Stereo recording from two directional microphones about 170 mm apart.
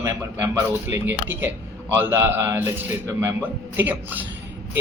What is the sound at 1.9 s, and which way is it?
Speech, 15° right (ahead or behind).